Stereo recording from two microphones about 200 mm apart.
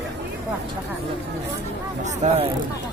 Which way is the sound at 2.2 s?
35° right (ahead or behind).